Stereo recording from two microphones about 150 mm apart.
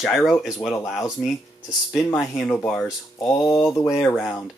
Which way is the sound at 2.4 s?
10° left (ahead or behind).